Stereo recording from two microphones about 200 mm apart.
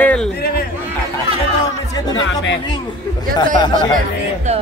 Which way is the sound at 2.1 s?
65° left (ahead or behind).